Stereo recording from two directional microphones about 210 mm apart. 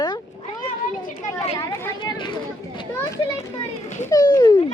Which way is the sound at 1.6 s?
15° left (ahead or behind).